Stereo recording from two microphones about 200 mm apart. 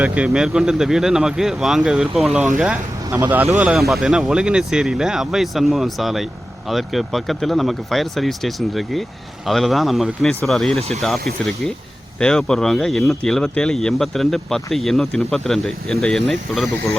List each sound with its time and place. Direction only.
0.0 s speech: 5° right (ahead or behind)
10.8 s speech: 30° right (ahead or behind)
12.2 s speech: 5° left (ahead or behind)